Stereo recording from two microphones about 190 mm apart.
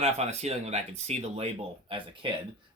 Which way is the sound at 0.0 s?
35° right (ahead or behind).